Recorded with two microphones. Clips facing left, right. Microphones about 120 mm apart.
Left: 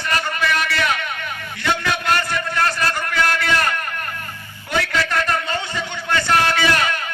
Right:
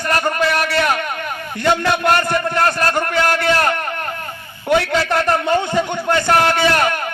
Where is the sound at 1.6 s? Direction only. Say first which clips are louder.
Right 6 dB; 50° right (ahead or behind).